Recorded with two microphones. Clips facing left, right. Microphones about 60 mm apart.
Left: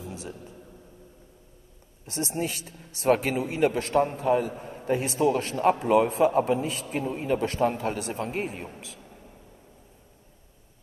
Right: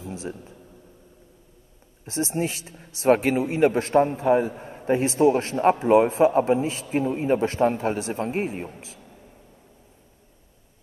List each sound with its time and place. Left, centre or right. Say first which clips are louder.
0.1 s speech: right 5 dB; right
2.0 s a man's voice: right 4 dB; right